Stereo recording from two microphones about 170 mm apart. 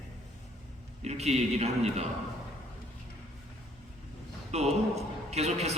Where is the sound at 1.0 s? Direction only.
40° right (ahead or behind).